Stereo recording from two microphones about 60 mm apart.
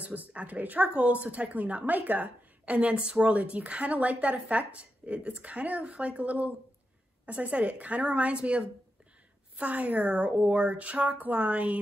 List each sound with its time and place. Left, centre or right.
0.0 s a woman's voice: right